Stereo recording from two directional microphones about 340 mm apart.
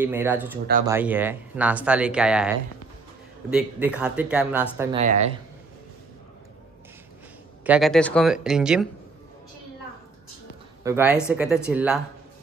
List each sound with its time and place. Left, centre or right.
0.0 s speech: centre
4.9 s speech: centre
7.6 s speech: centre
10.8 s speech: centre